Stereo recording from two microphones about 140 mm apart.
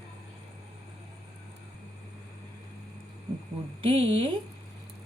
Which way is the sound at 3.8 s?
40° right (ahead or behind).